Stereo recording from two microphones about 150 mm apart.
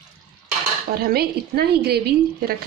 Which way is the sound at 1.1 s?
90° right.